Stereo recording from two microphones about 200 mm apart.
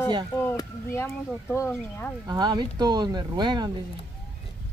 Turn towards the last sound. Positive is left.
turn(degrees=-20)  # may be behind; listen again after turning